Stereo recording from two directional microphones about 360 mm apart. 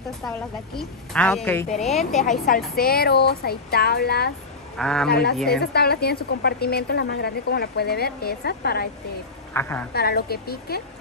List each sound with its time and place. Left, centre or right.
0.7 s a woman's voice: centre
2.4 s a woman's voice: left
4.7 s a woman's voice: centre
5.6 s a woman's voice: left
9.5 s a woman's voice: centre
9.9 s a woman's voice: left